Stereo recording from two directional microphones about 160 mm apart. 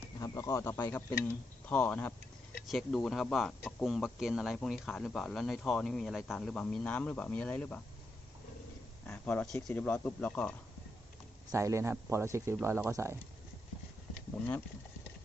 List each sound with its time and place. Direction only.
0.2 s speech: 20° left (ahead or behind)
9.0 s speech: 5° left (ahead or behind)
11.5 s speech: 15° right (ahead or behind)